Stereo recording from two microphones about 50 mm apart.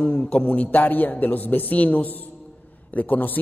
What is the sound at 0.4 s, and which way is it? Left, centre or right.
A man's voice, left.